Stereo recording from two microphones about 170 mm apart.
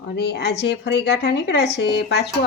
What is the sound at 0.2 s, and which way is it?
A woman's voice, 80° left.